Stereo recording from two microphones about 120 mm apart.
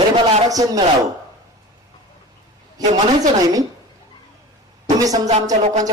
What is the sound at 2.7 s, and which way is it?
Speech, 30° right (ahead or behind).